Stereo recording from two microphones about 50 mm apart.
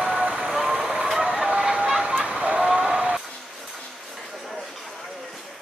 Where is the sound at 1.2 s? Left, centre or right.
Centre.